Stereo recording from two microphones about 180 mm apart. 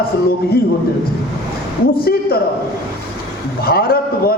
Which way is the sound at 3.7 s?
55° left (ahead or behind).